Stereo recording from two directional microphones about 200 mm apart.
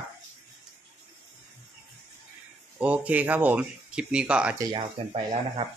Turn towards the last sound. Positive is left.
turn(degrees=-25)  # may be behind; listen again after turning